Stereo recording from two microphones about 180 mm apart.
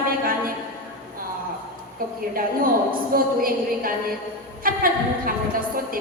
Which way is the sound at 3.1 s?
55° right (ahead or behind).